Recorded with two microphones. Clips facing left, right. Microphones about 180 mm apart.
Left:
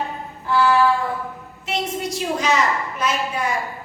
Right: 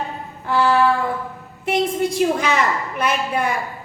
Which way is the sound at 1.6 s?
55° right (ahead or behind).